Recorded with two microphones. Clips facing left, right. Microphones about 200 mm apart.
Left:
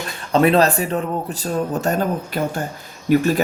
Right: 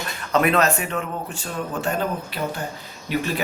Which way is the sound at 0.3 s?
30° left (ahead or behind).